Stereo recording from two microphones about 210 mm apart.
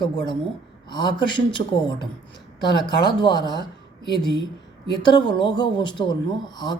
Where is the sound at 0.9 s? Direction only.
20° left (ahead or behind).